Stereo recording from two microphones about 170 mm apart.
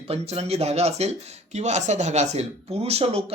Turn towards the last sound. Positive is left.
turn(degrees=-35)  # may be behind; listen again after turning